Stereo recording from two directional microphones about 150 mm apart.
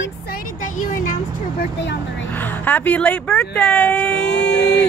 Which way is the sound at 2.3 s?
10° left (ahead or behind).